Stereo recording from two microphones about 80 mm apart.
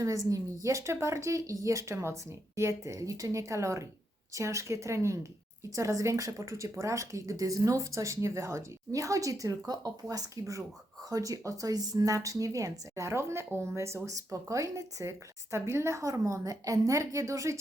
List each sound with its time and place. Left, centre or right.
0.0 s a woman's voice: right